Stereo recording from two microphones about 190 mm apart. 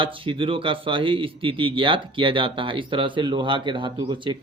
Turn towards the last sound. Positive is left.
turn(degrees=-25)  # may be behind; listen again after turning